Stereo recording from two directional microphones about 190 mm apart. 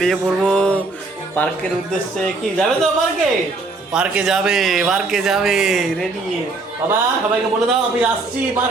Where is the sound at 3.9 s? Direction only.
5° right (ahead or behind).